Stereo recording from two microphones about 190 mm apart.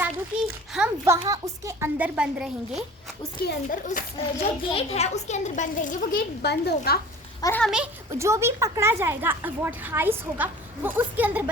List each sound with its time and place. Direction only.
0.0 s a sound: 5° right (ahead or behind)
1.2 s a woman's voice: 15° right (ahead or behind)
3.3 s a child's voice: 50° left (ahead or behind)
4.7 s a child's voice: 35° left (ahead or behind)
6.4 s a woman's voice: 60° left (ahead or behind)
7.6 s speech: 5° right (ahead or behind)
8.2 s a woman's voice: 15° right (ahead or behind)